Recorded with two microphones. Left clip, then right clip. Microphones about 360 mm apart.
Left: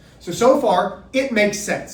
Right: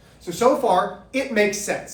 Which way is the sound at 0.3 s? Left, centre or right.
Centre.